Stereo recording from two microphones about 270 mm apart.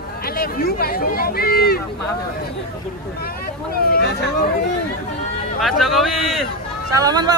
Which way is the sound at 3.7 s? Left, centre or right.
Left.